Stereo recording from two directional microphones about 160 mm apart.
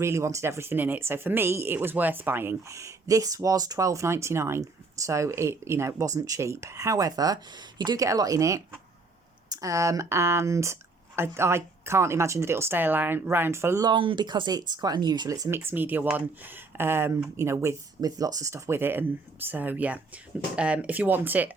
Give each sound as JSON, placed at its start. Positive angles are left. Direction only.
{"t": 0.0, "sound": "speech", "side_deg": -15}